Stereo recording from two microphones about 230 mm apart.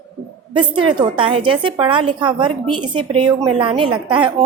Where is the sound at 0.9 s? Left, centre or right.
Right.